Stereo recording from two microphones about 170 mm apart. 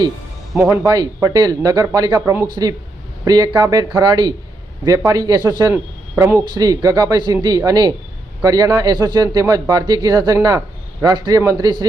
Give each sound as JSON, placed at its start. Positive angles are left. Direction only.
{"t": 0.5, "sound": "speech", "side_deg": 0}
{"t": 0.8, "sound": "speech", "side_deg": -20}